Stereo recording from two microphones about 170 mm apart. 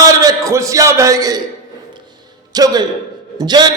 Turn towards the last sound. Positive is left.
turn(degrees=-25)  # may be behind; listen again after turning